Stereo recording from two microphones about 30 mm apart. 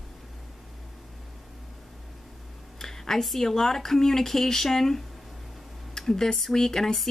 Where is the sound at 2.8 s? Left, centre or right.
Centre.